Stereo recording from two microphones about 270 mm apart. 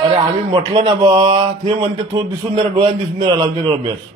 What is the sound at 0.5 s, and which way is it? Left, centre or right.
A man's voice, centre.